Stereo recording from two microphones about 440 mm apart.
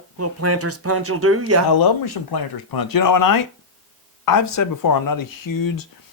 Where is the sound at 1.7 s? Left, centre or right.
Left.